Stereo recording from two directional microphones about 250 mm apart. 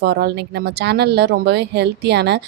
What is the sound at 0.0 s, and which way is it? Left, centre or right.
Speech, right.